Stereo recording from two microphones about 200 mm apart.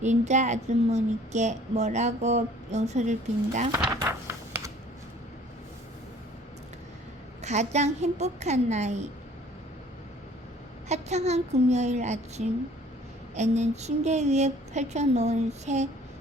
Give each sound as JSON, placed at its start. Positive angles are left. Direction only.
{"t": 0.0, "sound": "speech", "side_deg": -35}
{"t": 3.7, "sound": "a sound", "side_deg": -15}
{"t": 7.4, "sound": "speech", "side_deg": -35}
{"t": 10.8, "sound": "speech", "side_deg": -35}